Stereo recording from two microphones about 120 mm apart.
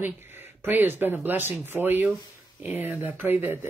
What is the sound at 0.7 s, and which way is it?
Speech, 15° right (ahead or behind).